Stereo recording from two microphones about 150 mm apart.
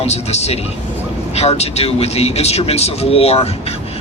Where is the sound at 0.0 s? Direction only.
45° left (ahead or behind).